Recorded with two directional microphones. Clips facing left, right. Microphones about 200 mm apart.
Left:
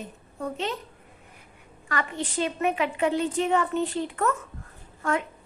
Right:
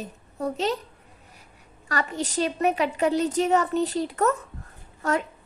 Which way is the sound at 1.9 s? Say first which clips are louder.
Right 2 dB; 40° right (ahead or behind).